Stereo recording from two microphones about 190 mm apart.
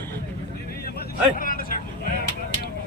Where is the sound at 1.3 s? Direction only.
45° left (ahead or behind).